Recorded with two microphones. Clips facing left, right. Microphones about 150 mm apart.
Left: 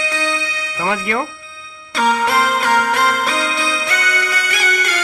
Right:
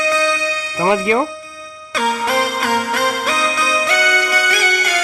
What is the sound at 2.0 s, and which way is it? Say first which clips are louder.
Music: left 3 dB; 45° right (ahead or behind).